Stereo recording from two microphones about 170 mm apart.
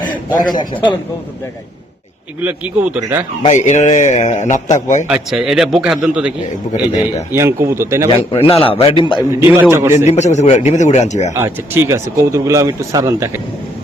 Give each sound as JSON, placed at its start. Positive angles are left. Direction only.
{"t": 0.3, "sound": "a man's voice", "side_deg": 25}
{"t": 2.4, "sound": "speech", "side_deg": -10}
{"t": 3.4, "sound": "a man's voice", "side_deg": 45}
{"t": 5.0, "sound": "a man's voice", "side_deg": -5}
{"t": 7.3, "sound": "speech", "side_deg": -15}
{"t": 8.3, "sound": "a man's voice", "side_deg": 35}
{"t": 9.4, "sound": "speech", "side_deg": -15}
{"t": 10.1, "sound": "a man's voice", "side_deg": 40}
{"t": 11.3, "sound": "speech", "side_deg": -15}